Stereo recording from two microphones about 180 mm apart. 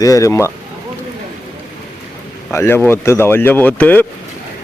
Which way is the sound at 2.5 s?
15° left (ahead or behind).